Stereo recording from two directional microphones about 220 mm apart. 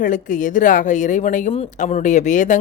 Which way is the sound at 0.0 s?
35° left (ahead or behind).